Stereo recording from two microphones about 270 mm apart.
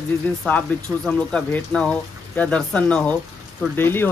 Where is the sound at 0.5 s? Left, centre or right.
Centre.